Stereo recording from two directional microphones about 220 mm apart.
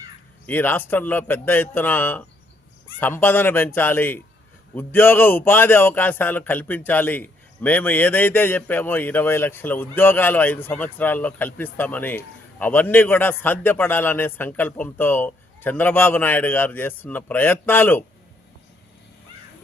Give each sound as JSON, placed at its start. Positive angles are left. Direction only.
{"t": 0.4, "sound": "a man's voice", "side_deg": 10}